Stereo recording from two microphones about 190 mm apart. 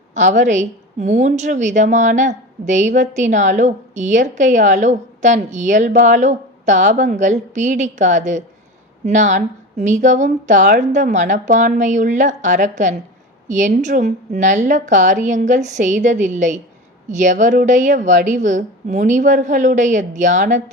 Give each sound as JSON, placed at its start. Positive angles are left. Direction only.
{"t": 0.1, "sound": "a woman's voice", "side_deg": -40}